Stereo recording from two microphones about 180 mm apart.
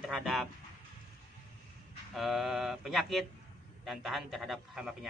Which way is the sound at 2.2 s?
Centre (ahead or behind).